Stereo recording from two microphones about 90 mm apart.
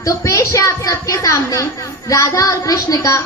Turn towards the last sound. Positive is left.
turn(degrees=35)  # may be behind; listen again after turning